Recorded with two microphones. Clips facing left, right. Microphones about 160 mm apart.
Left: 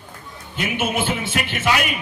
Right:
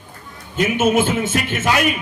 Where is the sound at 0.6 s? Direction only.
45° right (ahead or behind).